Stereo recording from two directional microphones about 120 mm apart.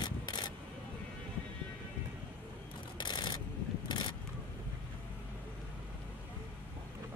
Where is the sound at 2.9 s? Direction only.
40° left (ahead or behind).